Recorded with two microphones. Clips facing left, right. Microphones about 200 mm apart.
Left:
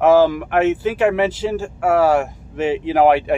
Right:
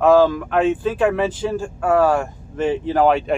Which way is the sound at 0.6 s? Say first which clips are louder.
Left 1 dB; 80° left.